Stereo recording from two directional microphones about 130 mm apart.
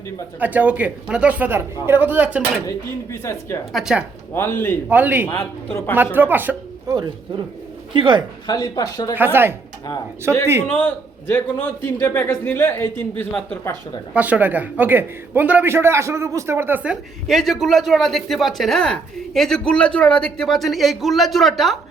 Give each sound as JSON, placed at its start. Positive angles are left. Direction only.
{"t": 0.3, "sound": "speech", "side_deg": -10}
{"t": 2.6, "sound": "speech", "side_deg": 20}
{"t": 3.7, "sound": "a man's voice", "side_deg": -5}
{"t": 4.4, "sound": "a man's voice", "side_deg": 15}
{"t": 4.9, "sound": "speech", "side_deg": -15}
{"t": 5.7, "sound": "a man's voice", "side_deg": 15}
{"t": 6.1, "sound": "speech", "side_deg": -15}
{"t": 6.8, "sound": "a man's voice", "side_deg": -30}
{"t": 8.4, "sound": "speech", "side_deg": 30}
{"t": 9.1, "sound": "a man's voice", "side_deg": -15}
{"t": 10.7, "sound": "a man's voice", "side_deg": 15}
{"t": 14.1, "sound": "a man's voice", "side_deg": -10}